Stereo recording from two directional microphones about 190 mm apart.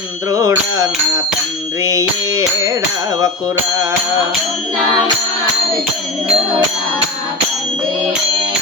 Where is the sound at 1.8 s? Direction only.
15° right (ahead or behind).